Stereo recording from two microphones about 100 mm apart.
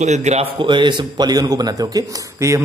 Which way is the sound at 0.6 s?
50° right (ahead or behind).